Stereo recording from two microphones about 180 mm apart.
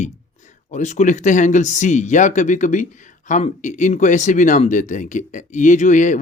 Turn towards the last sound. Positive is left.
turn(degrees=45)  # may be behind; listen again after turning